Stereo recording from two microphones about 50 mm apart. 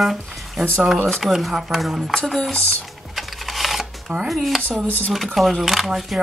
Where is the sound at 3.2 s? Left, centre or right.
Centre.